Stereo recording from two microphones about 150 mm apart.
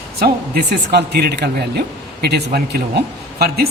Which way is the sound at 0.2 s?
90° right.